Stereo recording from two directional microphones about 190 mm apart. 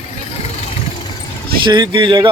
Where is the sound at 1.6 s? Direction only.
25° right (ahead or behind).